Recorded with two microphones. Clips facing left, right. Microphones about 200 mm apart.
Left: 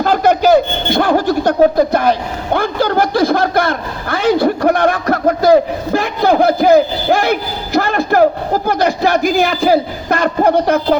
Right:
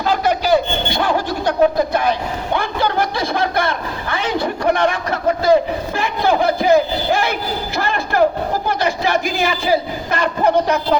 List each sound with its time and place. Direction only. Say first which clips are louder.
0.0 s speech: left 6 dB; 50° left (ahead or behind)